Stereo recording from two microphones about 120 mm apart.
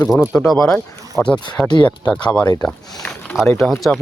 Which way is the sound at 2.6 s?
5° left (ahead or behind).